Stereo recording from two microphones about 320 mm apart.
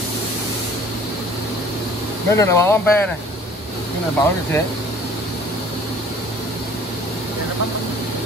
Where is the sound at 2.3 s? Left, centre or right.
Centre.